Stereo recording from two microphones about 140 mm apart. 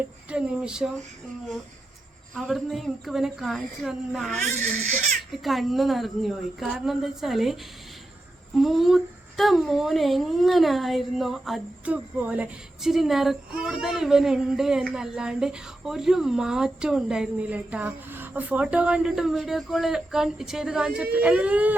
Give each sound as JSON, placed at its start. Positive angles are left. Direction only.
{"t": 0.3, "sound": "a woman's voice", "side_deg": -10}
{"t": 2.3, "sound": "a woman's voice", "side_deg": 0}